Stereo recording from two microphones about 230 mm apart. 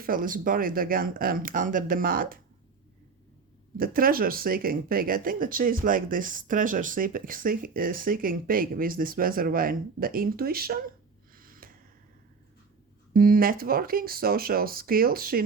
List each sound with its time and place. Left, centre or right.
0.0 s speech: right
3.8 s speech: right
11.3 s gasp: right
13.1 s speech: right